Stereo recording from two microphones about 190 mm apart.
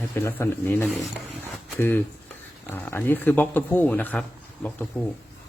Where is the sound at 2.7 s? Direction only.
10° left (ahead or behind).